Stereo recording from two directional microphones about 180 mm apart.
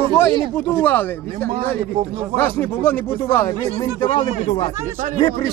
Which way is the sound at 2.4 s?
10° left (ahead or behind).